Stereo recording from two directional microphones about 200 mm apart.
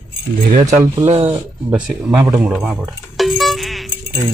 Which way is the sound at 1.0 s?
30° right (ahead or behind).